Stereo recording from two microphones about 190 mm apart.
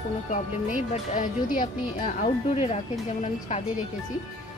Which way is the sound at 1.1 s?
45° left (ahead or behind).